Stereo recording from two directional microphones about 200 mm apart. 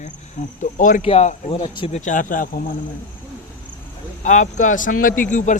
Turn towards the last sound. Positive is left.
turn(degrees=40)  # may be behind; listen again after turning